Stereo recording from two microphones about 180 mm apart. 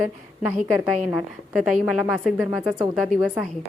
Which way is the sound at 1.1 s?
Centre (ahead or behind).